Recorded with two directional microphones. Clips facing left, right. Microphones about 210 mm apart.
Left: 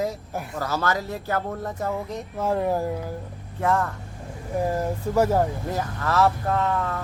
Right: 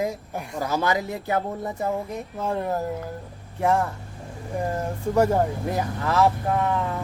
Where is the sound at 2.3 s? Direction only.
5° left (ahead or behind).